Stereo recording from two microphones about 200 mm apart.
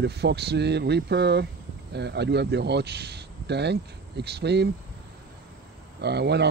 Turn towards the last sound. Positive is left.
turn(degrees=-55)  # may be behind; listen again after turning